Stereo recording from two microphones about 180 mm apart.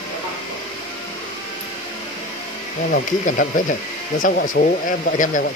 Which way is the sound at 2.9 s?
50° left (ahead or behind).